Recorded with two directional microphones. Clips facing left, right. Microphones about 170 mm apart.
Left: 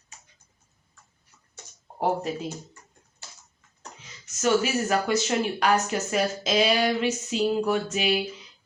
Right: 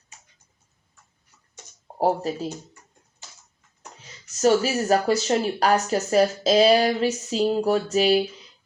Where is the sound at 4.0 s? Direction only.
35° right (ahead or behind).